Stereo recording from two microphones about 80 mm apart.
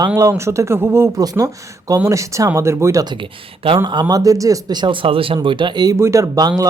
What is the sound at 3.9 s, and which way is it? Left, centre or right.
Speech, right.